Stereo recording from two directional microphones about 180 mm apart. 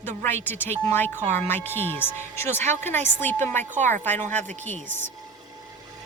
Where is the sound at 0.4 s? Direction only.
10° left (ahead or behind).